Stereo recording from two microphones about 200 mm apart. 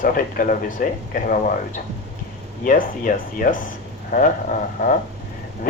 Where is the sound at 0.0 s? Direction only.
45° left (ahead or behind).